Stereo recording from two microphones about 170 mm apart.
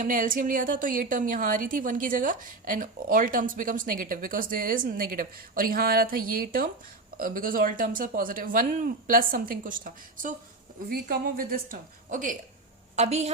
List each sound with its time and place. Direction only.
0.0 s a woman's voice: 50° right (ahead or behind)